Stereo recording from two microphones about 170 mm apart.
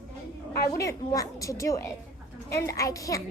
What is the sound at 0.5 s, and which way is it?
A woman's voice, 15° left (ahead or behind).